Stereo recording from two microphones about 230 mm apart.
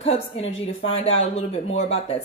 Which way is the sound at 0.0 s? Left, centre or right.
Left.